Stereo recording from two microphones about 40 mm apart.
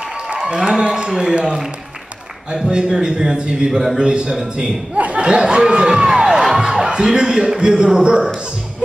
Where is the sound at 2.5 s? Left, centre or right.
Centre.